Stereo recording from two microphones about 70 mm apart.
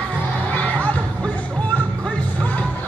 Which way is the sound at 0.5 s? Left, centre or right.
Left.